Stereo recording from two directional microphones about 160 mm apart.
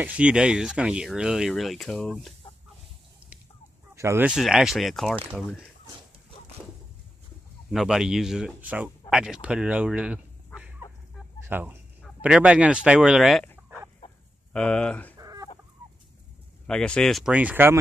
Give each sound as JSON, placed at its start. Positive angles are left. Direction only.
{"t": 0.0, "sound": "speech", "side_deg": -5}
{"t": 3.9, "sound": "speech", "side_deg": -15}
{"t": 4.3, "sound": "speech", "side_deg": -5}
{"t": 7.7, "sound": "speech", "side_deg": -5}
{"t": 9.1, "sound": "fowl", "side_deg": -5}
{"t": 11.4, "sound": "speech", "side_deg": -10}
{"t": 14.0, "sound": "chicken", "side_deg": 35}
{"t": 14.5, "sound": "speech", "side_deg": 5}
{"t": 15.1, "sound": "chicken", "side_deg": -20}
{"t": 16.6, "sound": "speech", "side_deg": 5}